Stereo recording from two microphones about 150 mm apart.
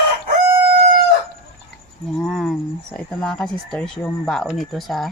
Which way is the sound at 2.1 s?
Centre (ahead or behind).